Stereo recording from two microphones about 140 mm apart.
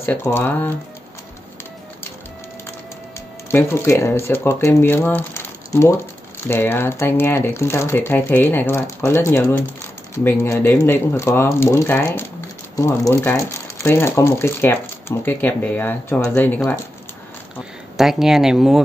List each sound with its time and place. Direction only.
0.0 s speech: 15° left (ahead or behind)
3.4 s speech: 15° left (ahead or behind)
17.9 s speech: 5° right (ahead or behind)